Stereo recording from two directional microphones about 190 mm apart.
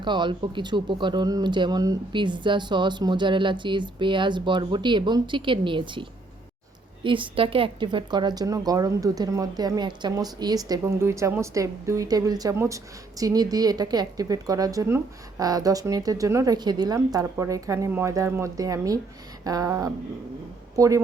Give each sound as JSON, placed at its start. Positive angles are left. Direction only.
{"t": 0.0, "sound": "a woman's voice", "side_deg": -25}